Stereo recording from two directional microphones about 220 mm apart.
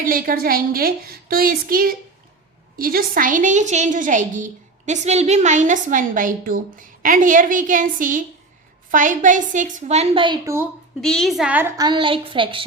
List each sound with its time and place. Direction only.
0.0 s a woman's voice: 40° right (ahead or behind); by 10.7 s 15° right (ahead or behind)
11.0 s a woman's voice: centre (ahead or behind); by 12.6 s 25° right (ahead or behind)